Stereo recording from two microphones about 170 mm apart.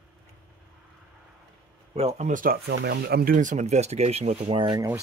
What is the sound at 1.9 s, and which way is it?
Speech, 40° right (ahead or behind).